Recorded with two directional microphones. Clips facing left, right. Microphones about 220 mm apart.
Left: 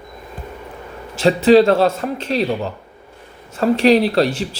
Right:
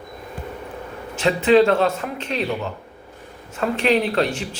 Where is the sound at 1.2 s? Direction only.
35° left (ahead or behind).